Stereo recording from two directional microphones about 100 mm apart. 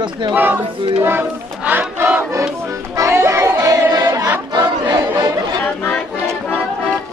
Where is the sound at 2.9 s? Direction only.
25° right (ahead or behind).